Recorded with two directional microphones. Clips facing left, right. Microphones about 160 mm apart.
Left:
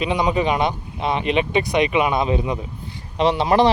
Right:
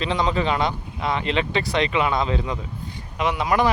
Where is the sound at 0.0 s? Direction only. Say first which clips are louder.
Left 3 dB; 15° left (ahead or behind).